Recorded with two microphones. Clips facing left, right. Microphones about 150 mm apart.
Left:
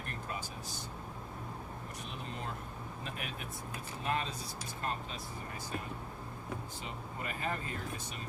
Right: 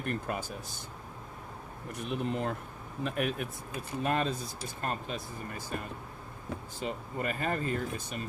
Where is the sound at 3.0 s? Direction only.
60° right (ahead or behind).